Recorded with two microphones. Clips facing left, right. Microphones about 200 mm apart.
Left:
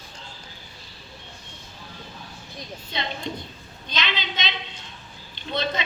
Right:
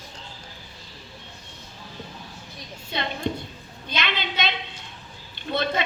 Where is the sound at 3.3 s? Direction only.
60° right (ahead or behind).